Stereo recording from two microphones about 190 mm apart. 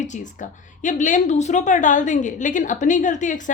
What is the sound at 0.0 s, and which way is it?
A woman's voice, 40° left (ahead or behind).